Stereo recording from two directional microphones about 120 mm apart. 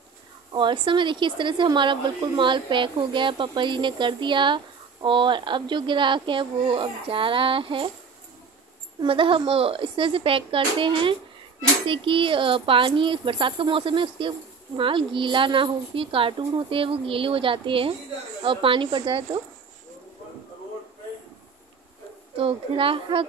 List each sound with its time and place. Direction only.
0.5 s speech: 40° right (ahead or behind)
9.0 s speech: 45° right (ahead or behind)
22.4 s speech: 50° right (ahead or behind)